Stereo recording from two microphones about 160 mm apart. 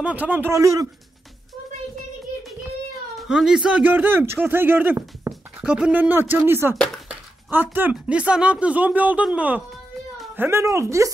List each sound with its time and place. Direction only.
0.0 s speech: 10° right (ahead or behind)
3.2 s speech: 5° right (ahead or behind); by 11.1 s 20° right (ahead or behind)